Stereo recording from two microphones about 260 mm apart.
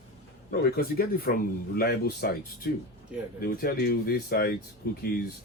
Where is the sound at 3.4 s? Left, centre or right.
Left.